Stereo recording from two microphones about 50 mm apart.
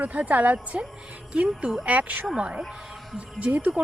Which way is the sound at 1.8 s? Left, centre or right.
Right.